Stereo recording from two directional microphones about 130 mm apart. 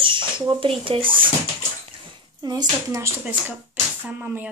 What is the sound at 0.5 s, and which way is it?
Speech, 40° right (ahead or behind).